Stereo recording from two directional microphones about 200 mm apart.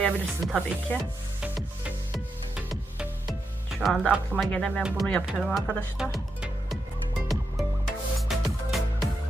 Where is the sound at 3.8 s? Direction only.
Centre (ahead or behind).